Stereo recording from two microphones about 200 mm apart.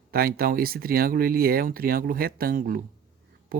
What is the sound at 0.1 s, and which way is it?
Speech, 50° right (ahead or behind).